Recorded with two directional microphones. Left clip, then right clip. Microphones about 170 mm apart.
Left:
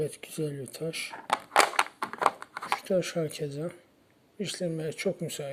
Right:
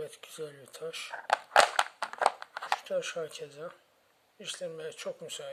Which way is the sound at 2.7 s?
20° left (ahead or behind).